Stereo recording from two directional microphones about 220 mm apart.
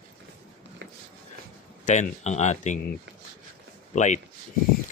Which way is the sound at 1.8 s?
35° left (ahead or behind).